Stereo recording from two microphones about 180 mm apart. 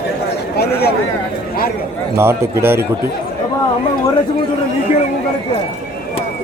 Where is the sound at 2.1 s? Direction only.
15° right (ahead or behind).